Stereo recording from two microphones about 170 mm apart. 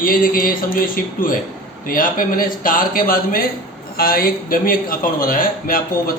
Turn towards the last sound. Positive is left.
turn(degrees=55)  # may be behind; listen again after turning